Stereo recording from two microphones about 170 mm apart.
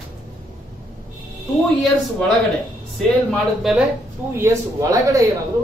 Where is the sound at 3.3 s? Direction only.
Centre (ahead or behind).